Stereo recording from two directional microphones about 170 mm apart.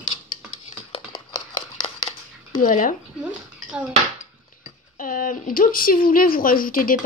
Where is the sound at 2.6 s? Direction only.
50° left (ahead or behind).